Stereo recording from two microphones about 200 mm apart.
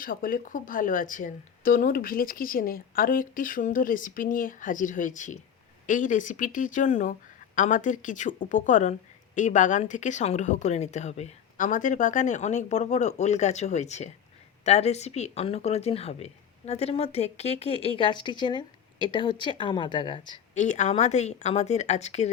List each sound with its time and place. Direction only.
0.0 s a woman's voice: 45° left (ahead or behind); by 20.4 s 25° left (ahead or behind)
20.6 s speech: 35° left (ahead or behind)